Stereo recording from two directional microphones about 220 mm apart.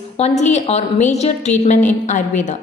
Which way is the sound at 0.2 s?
30° left (ahead or behind).